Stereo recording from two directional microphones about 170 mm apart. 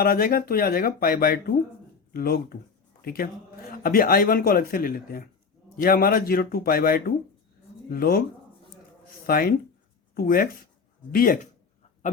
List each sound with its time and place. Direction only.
0.0 s speech: 60° left (ahead or behind)
9.2 s speech: 60° left (ahead or behind)